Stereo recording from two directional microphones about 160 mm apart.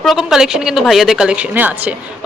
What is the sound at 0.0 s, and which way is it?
Speech, centre (ahead or behind).